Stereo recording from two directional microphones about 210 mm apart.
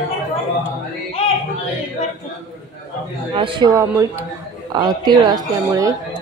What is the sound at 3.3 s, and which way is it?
A woman's voice, 25° right (ahead or behind).